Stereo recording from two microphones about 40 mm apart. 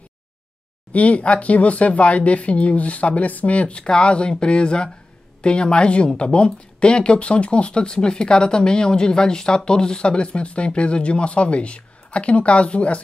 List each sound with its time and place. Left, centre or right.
0.9 s speech: left